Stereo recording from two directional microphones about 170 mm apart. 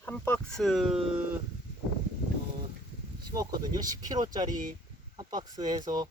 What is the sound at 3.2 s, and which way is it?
Speech, 25° right (ahead or behind).